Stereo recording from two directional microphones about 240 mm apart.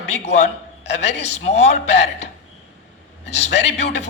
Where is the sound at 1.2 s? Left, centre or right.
Left.